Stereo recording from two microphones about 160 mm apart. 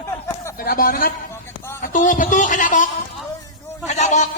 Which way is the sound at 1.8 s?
55° left (ahead or behind).